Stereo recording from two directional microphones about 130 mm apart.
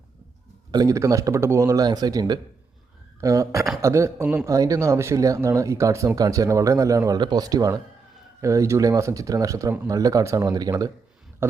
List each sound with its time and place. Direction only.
0.7 s speech: 30° right (ahead or behind)